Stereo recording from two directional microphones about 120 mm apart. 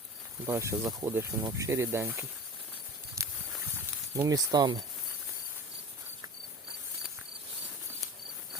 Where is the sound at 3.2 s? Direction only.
25° right (ahead or behind).